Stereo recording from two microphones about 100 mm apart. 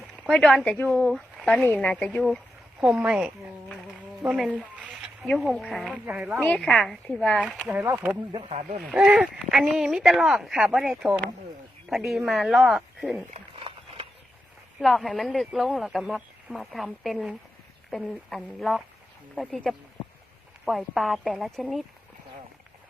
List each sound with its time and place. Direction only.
0.3 s speech: 5° left (ahead or behind)
1.6 s a woman's voice: 15° left (ahead or behind)
2.8 s speech: 10° right (ahead or behind)
4.0 s a sound: 10° right (ahead or behind)
4.4 s speech: 10° right (ahead or behind); by 7.4 s 5° left (ahead or behind)
7.9 s speech: 20° right (ahead or behind)
8.8 s speech: 10° right (ahead or behind)
13.6 s a sound: 65° right (ahead or behind)
14.8 s a woman's voice: centre (ahead or behind)
20.7 s speech: centre (ahead or behind)